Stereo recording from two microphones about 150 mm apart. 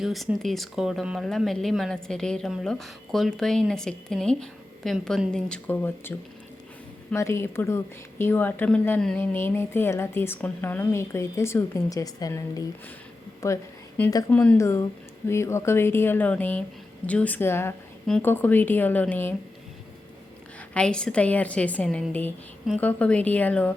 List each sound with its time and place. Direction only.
0.0 s a woman's voice: centre (ahead or behind); by 12.6 s 25° left (ahead or behind)
13.4 s a sound: 15° left (ahead or behind)
14.3 s a woman's voice: 10° left (ahead or behind)
20.7 s a woman's voice: 5° left (ahead or behind)